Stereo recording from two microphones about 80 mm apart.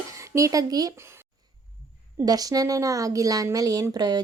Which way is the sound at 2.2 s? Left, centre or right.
Right.